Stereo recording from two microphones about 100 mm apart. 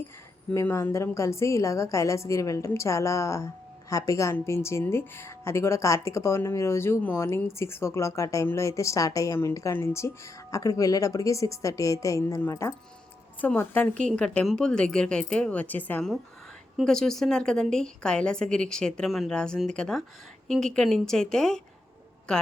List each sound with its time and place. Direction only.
0.5 s a woman's voice: 25° left (ahead or behind)
16.8 s a woman's voice: 5° left (ahead or behind)